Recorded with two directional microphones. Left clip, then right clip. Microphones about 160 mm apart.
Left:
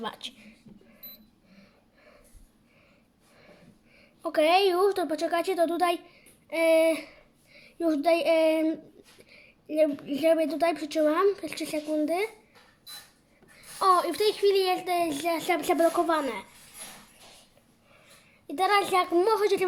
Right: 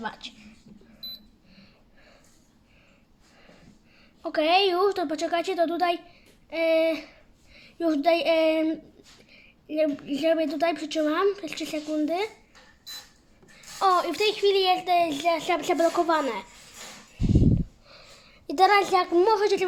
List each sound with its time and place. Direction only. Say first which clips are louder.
0.0 s speech: right 1 dB; 15° left (ahead or behind)
1.5 s a sound: right 2 dB; 5° left (ahead or behind)
4.2 s a woman's voice: even; 10° left (ahead or behind)
7.5 s a woman's voice: right 1 dB; centre (ahead or behind)
13.6 s a woman's voice: even; 5° left (ahead or behind)
18.4 s a child's voice: right 7 dB; 20° right (ahead or behind)
18.7 s a woman's voice: right 2 dB; centre (ahead or behind)